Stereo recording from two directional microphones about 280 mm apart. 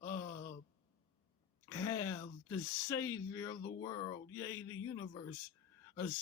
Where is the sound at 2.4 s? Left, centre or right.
Centre.